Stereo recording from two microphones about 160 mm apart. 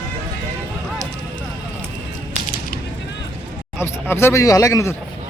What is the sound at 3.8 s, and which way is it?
A man's voice, 15° left (ahead or behind).